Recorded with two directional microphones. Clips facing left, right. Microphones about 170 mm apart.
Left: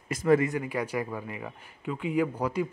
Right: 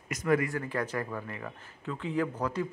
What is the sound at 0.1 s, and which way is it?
Speech, 30° left (ahead or behind).